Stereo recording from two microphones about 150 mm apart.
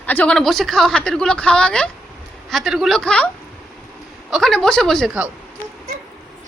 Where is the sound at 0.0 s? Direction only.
10° left (ahead or behind).